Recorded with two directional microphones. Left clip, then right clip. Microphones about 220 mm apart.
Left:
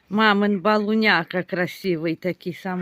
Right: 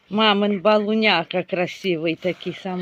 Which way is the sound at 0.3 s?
30° left (ahead or behind).